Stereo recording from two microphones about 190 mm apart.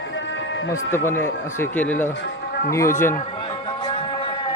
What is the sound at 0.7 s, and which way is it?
Speech, 15° left (ahead or behind).